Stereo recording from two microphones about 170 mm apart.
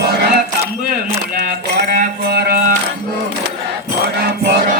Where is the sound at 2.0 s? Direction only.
65° right (ahead or behind).